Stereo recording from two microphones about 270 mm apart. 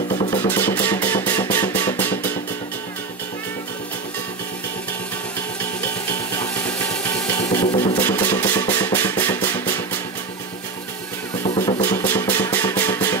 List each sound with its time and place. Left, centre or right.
0.1 s music: centre
7.4 s drum: centre
11.4 s music: centre